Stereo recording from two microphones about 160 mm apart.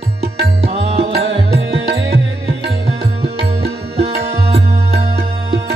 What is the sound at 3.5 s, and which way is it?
Music, 40° right (ahead or behind).